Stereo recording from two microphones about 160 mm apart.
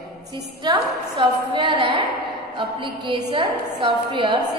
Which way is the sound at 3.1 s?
30° right (ahead or behind).